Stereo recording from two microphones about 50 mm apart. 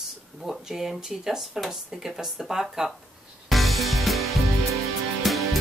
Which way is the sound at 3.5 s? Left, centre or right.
Centre.